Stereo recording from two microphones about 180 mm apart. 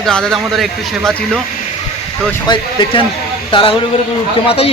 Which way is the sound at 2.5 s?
25° left (ahead or behind).